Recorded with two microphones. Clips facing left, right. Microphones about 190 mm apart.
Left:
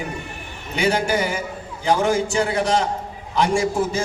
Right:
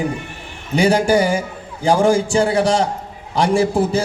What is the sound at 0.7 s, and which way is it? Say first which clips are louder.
A man's voice: right 6 dB; 35° right (ahead or behind).